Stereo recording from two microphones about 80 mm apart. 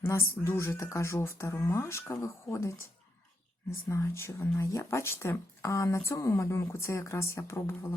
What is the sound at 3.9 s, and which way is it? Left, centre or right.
Speech, left.